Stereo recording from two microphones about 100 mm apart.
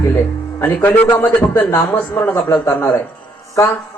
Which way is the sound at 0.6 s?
20° left (ahead or behind).